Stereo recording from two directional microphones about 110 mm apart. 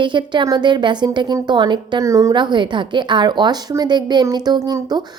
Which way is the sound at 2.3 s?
45° right (ahead or behind).